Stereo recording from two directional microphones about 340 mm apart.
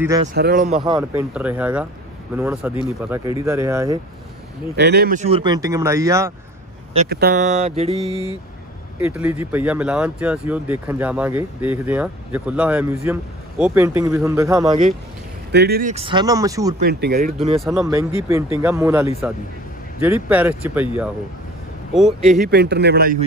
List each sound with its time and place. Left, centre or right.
0.0 s speech: centre
0.3 s speech: right
0.8 s speech: centre
4.7 s speech: right; by 6.3 s centre
6.9 s speech: right
9.0 s speech: centre
15.5 s speech: right; by 16.7 s centre
16.8 s speech: right
17.6 s speech: centre
22.4 s speech: right